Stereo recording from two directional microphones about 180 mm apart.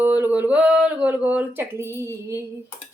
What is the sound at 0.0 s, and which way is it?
Speech, 10° right (ahead or behind).